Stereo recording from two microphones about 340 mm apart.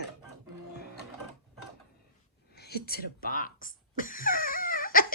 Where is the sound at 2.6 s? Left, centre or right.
Left.